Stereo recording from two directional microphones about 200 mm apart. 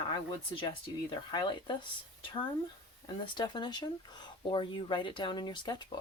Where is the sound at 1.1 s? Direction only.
20° left (ahead or behind).